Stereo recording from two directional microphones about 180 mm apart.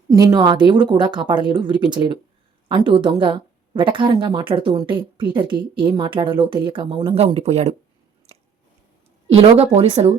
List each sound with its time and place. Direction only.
0.1 s a woman's voice: 20° right (ahead or behind); by 7.8 s 35° right (ahead or behind)
8.3 s biting: 35° right (ahead or behind)
9.3 s speech: 35° right (ahead or behind)